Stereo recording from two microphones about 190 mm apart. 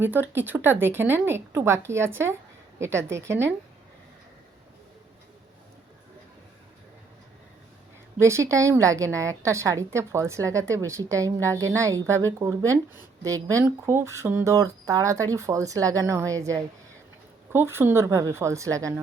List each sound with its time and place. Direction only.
0.0 s speech: 10° right (ahead or behind)
8.2 s speech: 15° right (ahead or behind)